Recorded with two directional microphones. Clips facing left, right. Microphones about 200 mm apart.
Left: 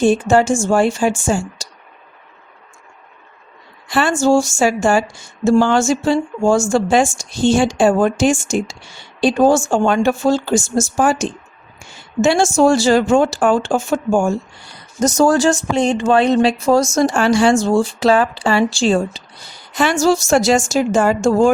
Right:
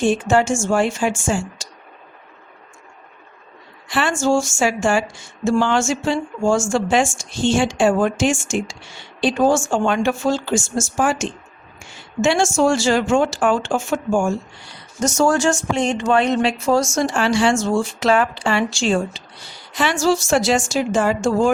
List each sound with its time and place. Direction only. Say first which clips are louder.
0.0 s speech: left 4 dB; 40° left (ahead or behind)
3.8 s a woman's voice: left 4 dB; 40° left (ahead or behind)